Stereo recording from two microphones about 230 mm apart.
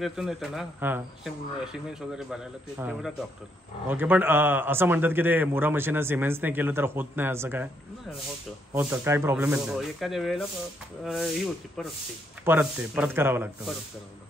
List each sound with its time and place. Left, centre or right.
0.0 s a man's voice: centre
8.7 s a man's voice: centre
12.4 s a man's voice: centre